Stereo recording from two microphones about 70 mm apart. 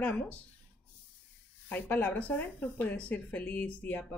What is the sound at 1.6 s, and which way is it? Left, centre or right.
Speech, left.